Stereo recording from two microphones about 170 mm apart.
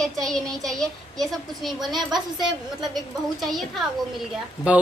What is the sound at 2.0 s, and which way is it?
Speech, 25° right (ahead or behind).